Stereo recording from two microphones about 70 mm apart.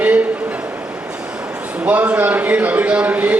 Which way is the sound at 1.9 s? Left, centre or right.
Centre.